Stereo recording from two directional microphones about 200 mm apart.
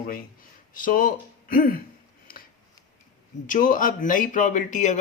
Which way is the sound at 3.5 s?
45° left (ahead or behind).